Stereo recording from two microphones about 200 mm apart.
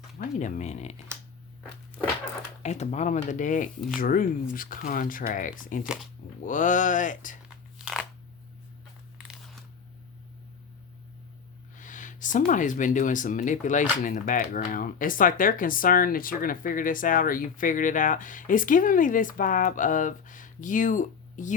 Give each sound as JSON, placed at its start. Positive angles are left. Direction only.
{"t": 0.2, "sound": "speech", "side_deg": 40}
{"t": 2.6, "sound": "speech", "side_deg": 35}
{"t": 5.8, "sound": "speech", "side_deg": -5}
{"t": 6.4, "sound": "speech", "side_deg": 40}
{"t": 7.4, "sound": "a sound", "side_deg": -5}
{"t": 11.8, "sound": "a sound", "side_deg": 40}
{"t": 12.5, "sound": "speech", "side_deg": 40}